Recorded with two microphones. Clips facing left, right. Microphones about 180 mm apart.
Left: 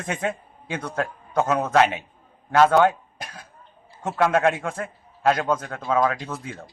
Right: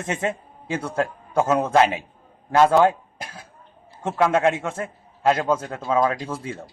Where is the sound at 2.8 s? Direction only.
30° right (ahead or behind).